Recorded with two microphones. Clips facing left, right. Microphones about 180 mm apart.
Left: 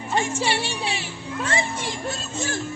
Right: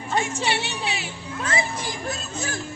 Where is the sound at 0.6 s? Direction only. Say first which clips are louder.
Left 1 dB; 30° left (ahead or behind).